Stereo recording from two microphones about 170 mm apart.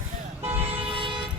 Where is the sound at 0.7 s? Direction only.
30° right (ahead or behind).